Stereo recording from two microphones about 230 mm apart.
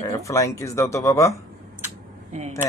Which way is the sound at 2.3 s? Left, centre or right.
Right.